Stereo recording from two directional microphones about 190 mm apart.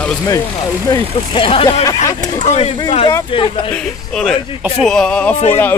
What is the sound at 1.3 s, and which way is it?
Speech, 30° left (ahead or behind).